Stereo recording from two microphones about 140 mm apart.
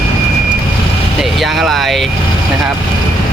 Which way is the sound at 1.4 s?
Centre (ahead or behind).